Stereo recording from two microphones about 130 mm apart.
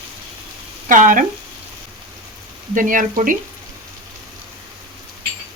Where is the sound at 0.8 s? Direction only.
90° right.